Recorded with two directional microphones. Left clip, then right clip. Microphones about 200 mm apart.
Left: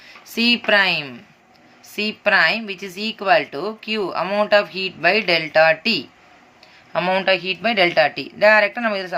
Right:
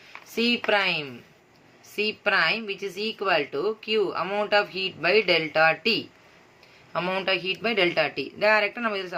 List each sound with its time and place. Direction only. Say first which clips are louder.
0.3 s a woman's voice: left 7 dB; 20° left (ahead or behind)